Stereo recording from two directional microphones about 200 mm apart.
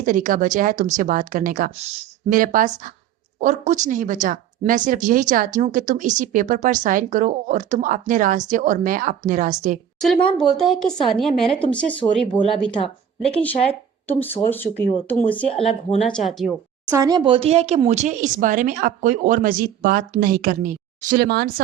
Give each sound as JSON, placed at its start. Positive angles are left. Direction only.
{"t": 0.0, "sound": "speech", "side_deg": -40}
{"t": 10.2, "sound": "speech", "side_deg": 0}
{"t": 15.4, "sound": "speech", "side_deg": 30}
{"t": 16.0, "sound": "speech", "side_deg": 0}
{"t": 16.9, "sound": "speech", "side_deg": -20}